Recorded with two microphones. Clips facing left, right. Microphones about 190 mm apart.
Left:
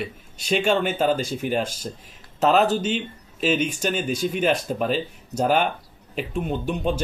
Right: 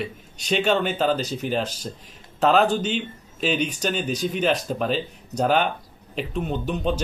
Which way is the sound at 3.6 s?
45° left (ahead or behind).